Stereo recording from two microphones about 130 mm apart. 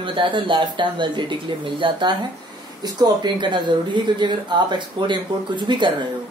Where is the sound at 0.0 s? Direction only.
40° right (ahead or behind).